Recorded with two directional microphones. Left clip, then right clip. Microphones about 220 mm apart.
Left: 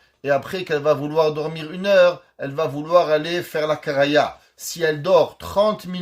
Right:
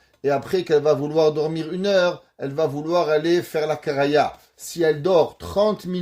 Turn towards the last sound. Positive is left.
turn(degrees=-40)  # may be behind; listen again after turning